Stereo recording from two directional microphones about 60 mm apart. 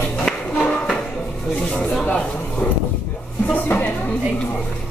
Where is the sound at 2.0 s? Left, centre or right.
Left.